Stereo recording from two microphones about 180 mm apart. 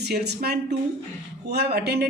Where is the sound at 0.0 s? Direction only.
65° right (ahead or behind).